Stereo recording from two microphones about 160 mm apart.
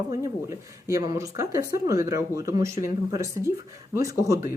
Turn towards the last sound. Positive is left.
turn(degrees=-20)  # may be behind; listen again after turning